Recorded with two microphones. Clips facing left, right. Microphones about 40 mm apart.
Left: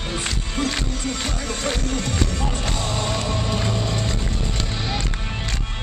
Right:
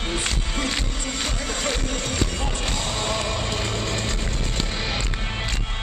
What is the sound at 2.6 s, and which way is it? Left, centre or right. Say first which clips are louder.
Music: left 1 dB; right.